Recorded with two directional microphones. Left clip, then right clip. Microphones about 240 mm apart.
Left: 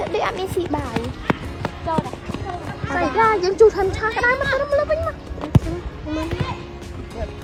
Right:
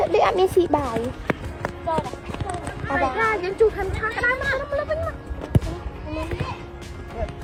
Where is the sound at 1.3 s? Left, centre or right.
Centre.